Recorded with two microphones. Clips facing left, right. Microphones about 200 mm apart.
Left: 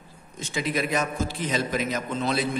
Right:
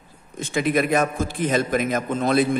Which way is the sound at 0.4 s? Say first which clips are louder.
Right 6 dB; 55° right (ahead or behind).